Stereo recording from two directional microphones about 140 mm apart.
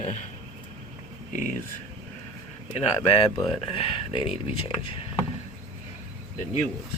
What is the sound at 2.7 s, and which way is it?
Speech, 45° left (ahead or behind).